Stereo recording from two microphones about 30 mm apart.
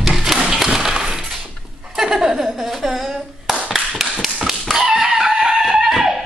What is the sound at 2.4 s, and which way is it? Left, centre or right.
Clapping, centre.